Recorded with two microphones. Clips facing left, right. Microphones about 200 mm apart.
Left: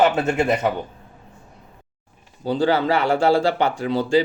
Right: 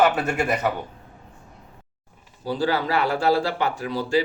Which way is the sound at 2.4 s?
25° left (ahead or behind).